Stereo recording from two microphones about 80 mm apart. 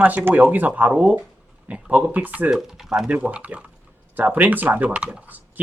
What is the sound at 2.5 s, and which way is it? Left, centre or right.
Speech, centre.